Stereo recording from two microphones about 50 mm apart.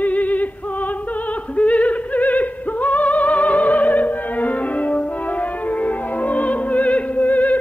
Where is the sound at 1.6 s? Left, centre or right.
Left.